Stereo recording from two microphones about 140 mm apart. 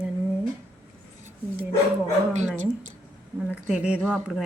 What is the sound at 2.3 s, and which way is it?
Speech, 60° right (ahead or behind).